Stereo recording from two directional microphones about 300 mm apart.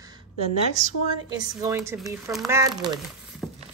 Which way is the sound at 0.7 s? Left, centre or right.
Right.